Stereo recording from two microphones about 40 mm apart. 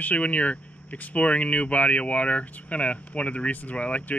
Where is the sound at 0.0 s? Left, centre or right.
Left.